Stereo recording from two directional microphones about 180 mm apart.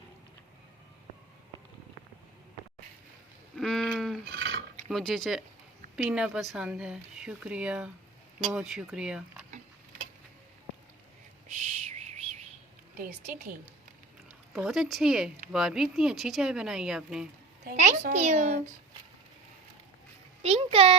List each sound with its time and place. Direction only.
3.5 s sheep: 5° left (ahead or behind)
4.9 s speech: centre (ahead or behind)
11.4 s owl: 40° right (ahead or behind)
13.0 s a child's voice: 50° right (ahead or behind)
14.5 s speech: centre (ahead or behind)
17.7 s a child's voice: 50° right (ahead or behind)
20.4 s a child's voice: 35° right (ahead or behind)